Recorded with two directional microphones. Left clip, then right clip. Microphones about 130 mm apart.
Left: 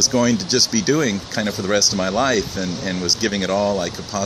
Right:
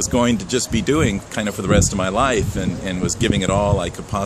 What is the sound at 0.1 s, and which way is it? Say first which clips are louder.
Speech: even; 20° right (ahead or behind).